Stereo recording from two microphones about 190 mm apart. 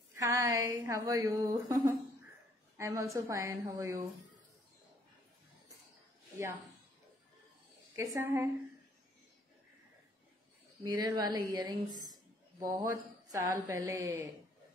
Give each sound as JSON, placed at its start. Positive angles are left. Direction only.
{"t": 0.1, "sound": "a woman's voice", "side_deg": -15}
{"t": 7.9, "sound": "a woman's voice", "side_deg": -15}
{"t": 10.8, "sound": "a woman's voice", "side_deg": -20}